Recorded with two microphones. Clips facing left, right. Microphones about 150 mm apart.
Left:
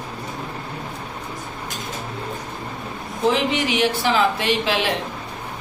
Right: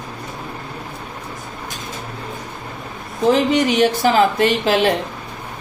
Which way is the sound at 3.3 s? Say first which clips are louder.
Right 8 dB; 40° right (ahead or behind).